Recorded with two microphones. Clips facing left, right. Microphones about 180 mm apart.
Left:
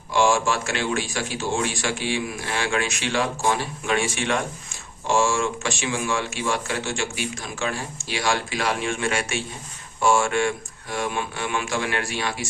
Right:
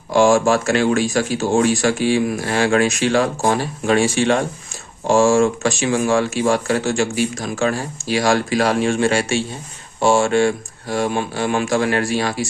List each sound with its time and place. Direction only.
0.1 s speech: 40° right (ahead or behind)